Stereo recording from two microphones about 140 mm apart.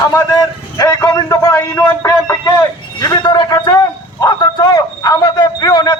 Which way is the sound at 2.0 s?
25° left (ahead or behind).